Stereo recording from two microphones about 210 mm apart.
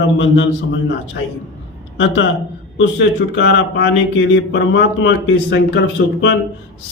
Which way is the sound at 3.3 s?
60° left (ahead or behind).